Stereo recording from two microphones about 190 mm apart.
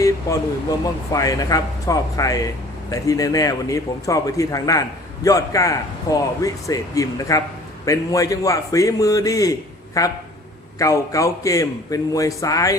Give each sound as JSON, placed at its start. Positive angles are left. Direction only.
{"t": 1.1, "sound": "speech", "side_deg": 20}